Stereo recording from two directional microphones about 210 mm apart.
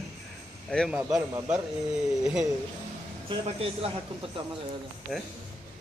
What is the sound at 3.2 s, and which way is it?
Speech, 25° right (ahead or behind).